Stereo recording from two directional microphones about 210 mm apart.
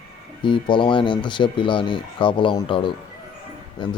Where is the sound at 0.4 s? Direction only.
25° left (ahead or behind).